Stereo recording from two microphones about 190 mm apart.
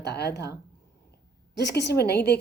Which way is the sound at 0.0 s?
60° left (ahead or behind).